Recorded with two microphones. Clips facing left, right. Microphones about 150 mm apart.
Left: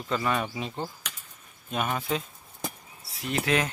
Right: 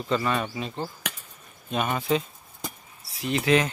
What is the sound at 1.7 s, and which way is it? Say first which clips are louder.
Speech: right 4 dB; centre (ahead or behind).